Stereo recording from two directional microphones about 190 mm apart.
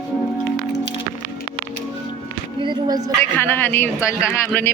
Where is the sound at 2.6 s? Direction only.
20° right (ahead or behind).